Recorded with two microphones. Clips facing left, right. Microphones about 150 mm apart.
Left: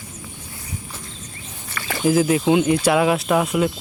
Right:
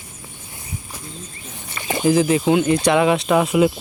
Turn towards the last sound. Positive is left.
turn(degrees=-5)  # may be behind; listen again after turning